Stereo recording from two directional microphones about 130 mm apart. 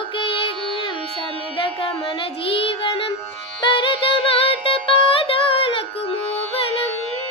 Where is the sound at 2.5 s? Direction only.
45° left (ahead or behind).